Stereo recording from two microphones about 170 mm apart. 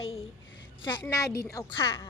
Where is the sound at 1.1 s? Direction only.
20° left (ahead or behind).